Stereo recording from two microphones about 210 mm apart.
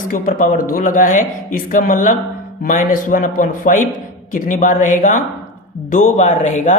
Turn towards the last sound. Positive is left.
turn(degrees=35)  # may be behind; listen again after turning